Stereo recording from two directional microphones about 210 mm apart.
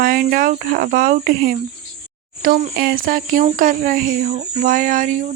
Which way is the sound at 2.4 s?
45° right (ahead or behind).